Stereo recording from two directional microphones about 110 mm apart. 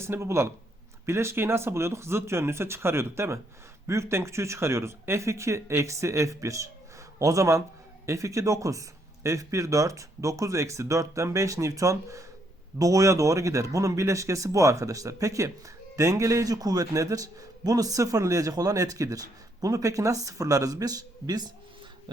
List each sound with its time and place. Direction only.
0.0 s a man's voice: 25° right (ahead or behind)